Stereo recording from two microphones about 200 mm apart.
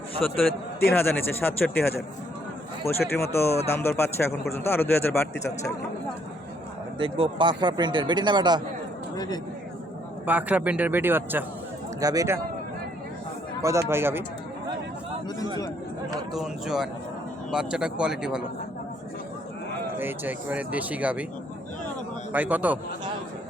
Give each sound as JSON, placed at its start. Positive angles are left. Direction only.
{"t": 0.2, "sound": "a man's voice", "side_deg": 0}
{"t": 3.2, "sound": "a man's voice", "side_deg": 10}
{"t": 7.0, "sound": "speech", "side_deg": -25}
{"t": 9.1, "sound": "speech", "side_deg": 20}
{"t": 10.2, "sound": "speech", "side_deg": -10}
{"t": 13.6, "sound": "speech", "side_deg": -15}
{"t": 16.3, "sound": "a man's voice", "side_deg": 0}
{"t": 20.0, "sound": "speech", "side_deg": -10}
{"t": 22.3, "sound": "speech", "side_deg": -5}